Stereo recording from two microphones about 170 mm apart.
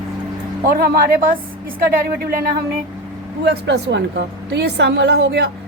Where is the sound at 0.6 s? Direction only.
60° right (ahead or behind).